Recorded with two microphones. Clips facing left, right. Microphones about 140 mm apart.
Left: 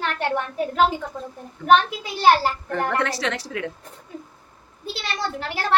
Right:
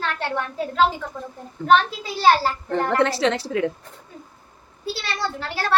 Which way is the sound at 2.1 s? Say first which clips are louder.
Even; 15° left (ahead or behind).